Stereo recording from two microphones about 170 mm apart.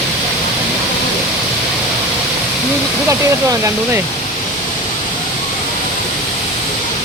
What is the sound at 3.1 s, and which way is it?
Speech, 15° right (ahead or behind).